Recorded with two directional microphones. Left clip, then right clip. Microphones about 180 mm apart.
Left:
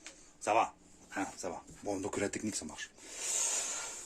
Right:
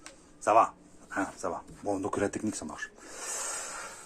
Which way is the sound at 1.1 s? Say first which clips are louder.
Right 6 dB; 15° left (ahead or behind).